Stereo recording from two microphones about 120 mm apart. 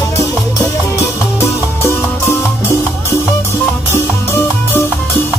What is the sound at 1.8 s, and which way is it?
Music, 20° left (ahead or behind).